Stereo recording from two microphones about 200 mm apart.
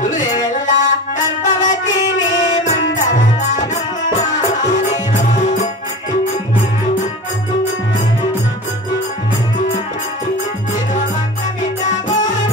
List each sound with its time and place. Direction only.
0.0 s music: 40° left (ahead or behind)
11.8 s music: 40° left (ahead or behind)